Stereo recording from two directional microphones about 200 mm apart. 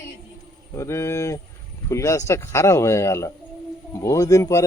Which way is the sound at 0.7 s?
15° left (ahead or behind).